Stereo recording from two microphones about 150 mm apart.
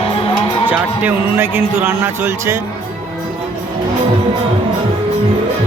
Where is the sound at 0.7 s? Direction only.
15° right (ahead or behind).